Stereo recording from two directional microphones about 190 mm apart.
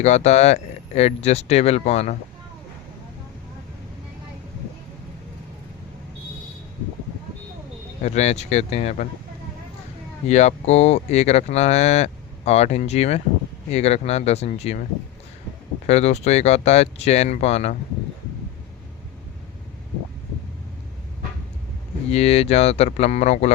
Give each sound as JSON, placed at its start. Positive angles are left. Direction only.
{"t": 0.0, "sound": "speech", "side_deg": 35}
{"t": 8.0, "sound": "speech", "side_deg": 35}
{"t": 10.2, "sound": "speech", "side_deg": 35}
{"t": 15.9, "sound": "speech", "side_deg": 35}
{"t": 22.1, "sound": "speech", "side_deg": 35}